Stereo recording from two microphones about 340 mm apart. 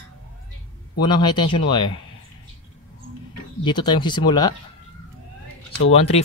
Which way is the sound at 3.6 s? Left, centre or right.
Centre.